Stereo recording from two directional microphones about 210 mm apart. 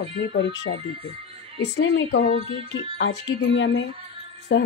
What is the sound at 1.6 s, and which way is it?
Speech, 55° left (ahead or behind).